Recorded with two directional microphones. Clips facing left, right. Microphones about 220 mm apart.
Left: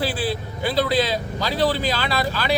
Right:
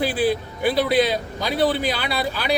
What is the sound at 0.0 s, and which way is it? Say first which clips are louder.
Speech: right 4 dB; 20° right (ahead or behind).